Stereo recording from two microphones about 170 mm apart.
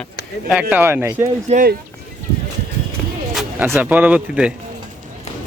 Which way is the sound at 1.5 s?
40° right (ahead or behind).